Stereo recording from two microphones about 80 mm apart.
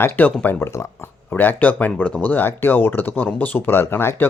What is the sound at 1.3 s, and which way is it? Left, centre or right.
Speech, left.